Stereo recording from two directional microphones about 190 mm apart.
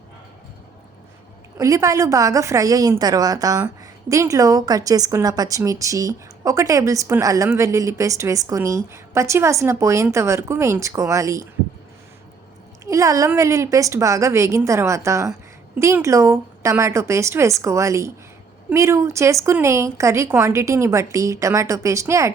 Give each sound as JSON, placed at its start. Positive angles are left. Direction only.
{"t": 1.5, "sound": "a woman's voice", "side_deg": -15}
{"t": 12.8, "sound": "a woman's voice", "side_deg": -15}